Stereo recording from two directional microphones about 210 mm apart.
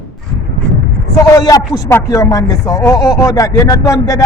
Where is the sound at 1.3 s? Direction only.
15° left (ahead or behind).